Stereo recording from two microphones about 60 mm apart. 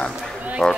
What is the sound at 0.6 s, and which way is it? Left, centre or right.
Speech, centre.